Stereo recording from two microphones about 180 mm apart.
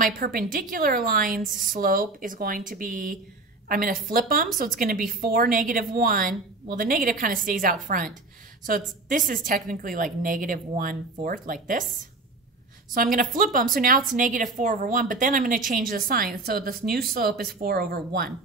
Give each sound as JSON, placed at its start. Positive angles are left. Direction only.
{"t": 0.0, "sound": "a woman's voice", "side_deg": -50}
{"t": 12.9, "sound": "a woman's voice", "side_deg": -50}